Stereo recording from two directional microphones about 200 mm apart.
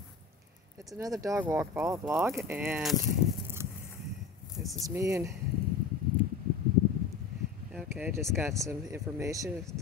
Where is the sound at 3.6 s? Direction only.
15° right (ahead or behind).